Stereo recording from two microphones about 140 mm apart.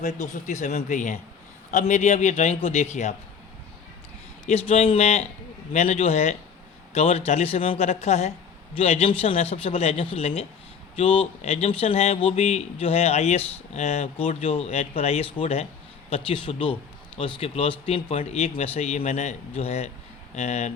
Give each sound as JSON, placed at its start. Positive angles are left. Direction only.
{"t": 0.0, "sound": "a man's voice", "side_deg": 60}
{"t": 4.4, "sound": "a man's voice", "side_deg": 45}